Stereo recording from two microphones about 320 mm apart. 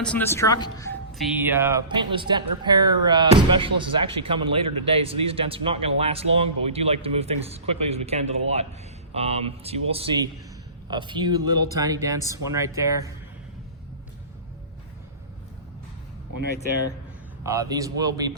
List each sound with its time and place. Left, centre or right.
0.0 s speech: centre
1.3 s speech: centre
17.4 s speech: centre